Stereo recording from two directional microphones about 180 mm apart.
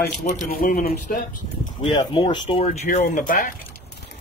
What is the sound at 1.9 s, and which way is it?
Speech, 25° left (ahead or behind).